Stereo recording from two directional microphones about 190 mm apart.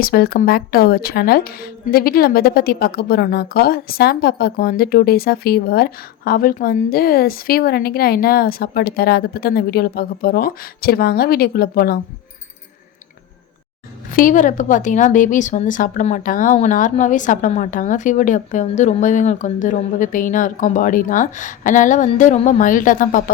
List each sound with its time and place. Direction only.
0.0 s speech: 55° left (ahead or behind)
14.1 s speech: 45° left (ahead or behind)